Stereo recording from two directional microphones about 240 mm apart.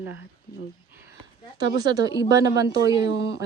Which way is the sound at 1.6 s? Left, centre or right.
Centre.